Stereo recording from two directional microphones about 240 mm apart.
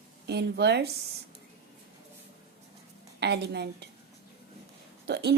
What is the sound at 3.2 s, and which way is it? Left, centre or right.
Speech, right.